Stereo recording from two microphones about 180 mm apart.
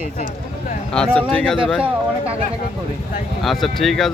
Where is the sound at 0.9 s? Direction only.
5° left (ahead or behind).